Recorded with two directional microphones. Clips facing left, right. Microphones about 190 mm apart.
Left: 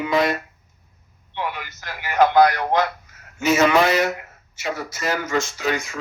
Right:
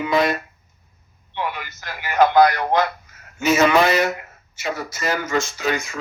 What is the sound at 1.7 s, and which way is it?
Speech, 45° right (ahead or behind).